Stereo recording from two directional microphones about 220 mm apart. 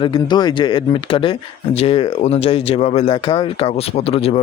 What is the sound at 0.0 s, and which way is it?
Speech, 20° left (ahead or behind).